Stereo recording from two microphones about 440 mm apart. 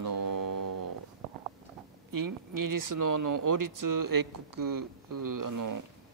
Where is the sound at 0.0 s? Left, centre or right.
Right.